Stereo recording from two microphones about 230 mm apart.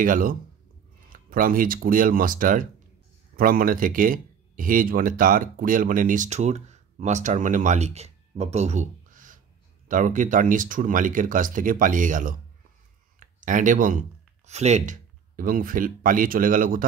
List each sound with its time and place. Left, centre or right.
0.0 s speech: right